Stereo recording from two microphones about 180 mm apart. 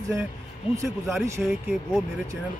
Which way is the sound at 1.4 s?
5° right (ahead or behind).